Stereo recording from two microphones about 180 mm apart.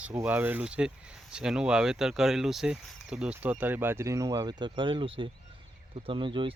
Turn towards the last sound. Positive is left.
turn(degrees=-30)  # may be behind; listen again after turning